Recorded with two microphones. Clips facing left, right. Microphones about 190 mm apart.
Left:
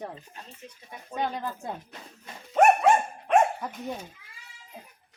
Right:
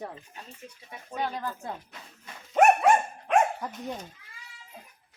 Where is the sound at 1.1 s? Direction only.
20° left (ahead or behind).